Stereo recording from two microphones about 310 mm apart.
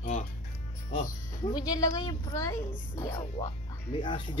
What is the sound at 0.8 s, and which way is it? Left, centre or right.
A child's voice, centre.